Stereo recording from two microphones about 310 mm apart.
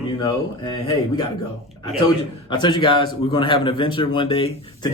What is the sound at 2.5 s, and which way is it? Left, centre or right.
A man's voice, centre.